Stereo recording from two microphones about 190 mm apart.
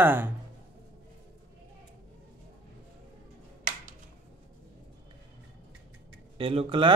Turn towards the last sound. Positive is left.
turn(degrees=-25)  # may be behind; listen again after turning